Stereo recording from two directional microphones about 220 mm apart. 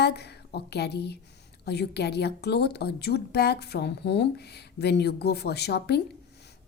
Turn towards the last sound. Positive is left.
turn(degrees=50)  # may be behind; listen again after turning